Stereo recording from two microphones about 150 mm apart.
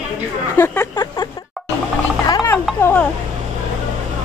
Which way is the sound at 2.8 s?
15° left (ahead or behind).